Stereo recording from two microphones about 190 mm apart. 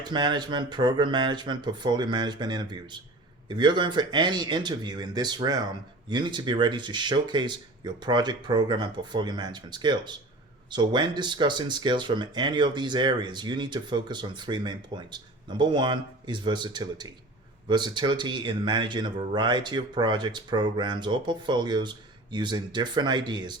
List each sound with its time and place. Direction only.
0.0 s speech: 25° right (ahead or behind)